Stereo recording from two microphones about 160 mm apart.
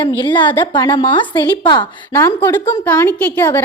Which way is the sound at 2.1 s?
15° left (ahead or behind).